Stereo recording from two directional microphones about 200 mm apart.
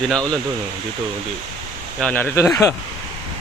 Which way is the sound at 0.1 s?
5° left (ahead or behind).